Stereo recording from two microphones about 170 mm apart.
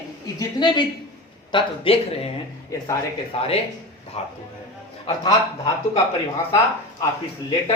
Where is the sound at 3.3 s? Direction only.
35° left (ahead or behind).